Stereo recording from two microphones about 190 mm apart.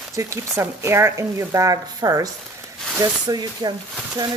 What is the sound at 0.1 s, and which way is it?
Speech, 15° right (ahead or behind).